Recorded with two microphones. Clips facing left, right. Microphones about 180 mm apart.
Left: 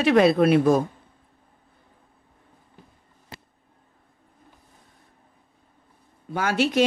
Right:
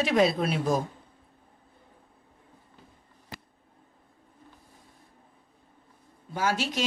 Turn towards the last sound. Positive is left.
turn(degrees=60)  # may be behind; listen again after turning